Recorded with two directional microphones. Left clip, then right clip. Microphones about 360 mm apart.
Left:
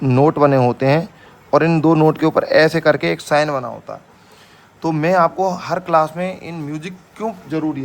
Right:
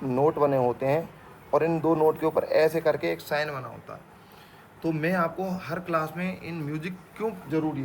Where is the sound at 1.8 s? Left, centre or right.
Left.